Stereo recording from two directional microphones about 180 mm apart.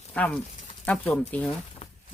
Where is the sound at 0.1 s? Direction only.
5° left (ahead or behind).